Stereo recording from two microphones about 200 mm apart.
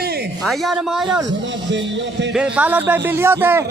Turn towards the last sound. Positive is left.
turn(degrees=-10)  # may be behind; listen again after turning